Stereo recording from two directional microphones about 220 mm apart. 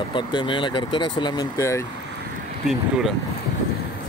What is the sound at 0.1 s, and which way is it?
Speech, 20° left (ahead or behind).